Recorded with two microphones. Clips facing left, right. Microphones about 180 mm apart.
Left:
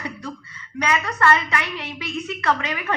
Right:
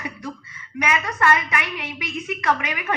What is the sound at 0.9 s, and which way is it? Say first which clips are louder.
A woman's voice: left 1 dB; 15° right (ahead or behind).